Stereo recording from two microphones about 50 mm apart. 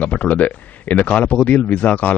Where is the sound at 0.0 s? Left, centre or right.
Left.